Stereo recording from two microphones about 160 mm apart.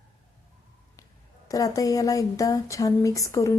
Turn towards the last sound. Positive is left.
turn(degrees=20)  # may be behind; listen again after turning